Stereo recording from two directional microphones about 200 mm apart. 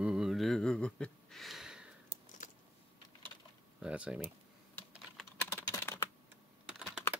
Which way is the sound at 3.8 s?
5° right (ahead or behind).